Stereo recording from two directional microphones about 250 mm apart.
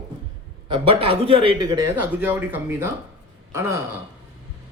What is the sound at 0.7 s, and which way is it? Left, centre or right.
A man's voice, right.